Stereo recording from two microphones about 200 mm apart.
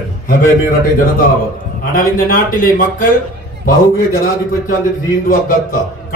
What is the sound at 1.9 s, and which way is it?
A man's voice, 45° left (ahead or behind).